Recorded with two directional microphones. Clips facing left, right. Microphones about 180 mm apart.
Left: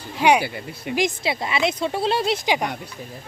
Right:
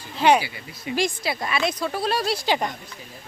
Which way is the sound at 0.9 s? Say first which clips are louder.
Left 2 dB; 20° left (ahead or behind).